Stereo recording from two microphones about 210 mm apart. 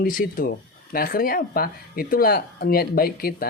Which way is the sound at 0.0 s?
40° left (ahead or behind).